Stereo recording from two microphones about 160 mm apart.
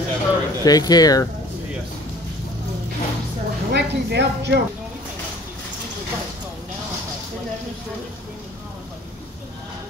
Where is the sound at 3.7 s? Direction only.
90° right.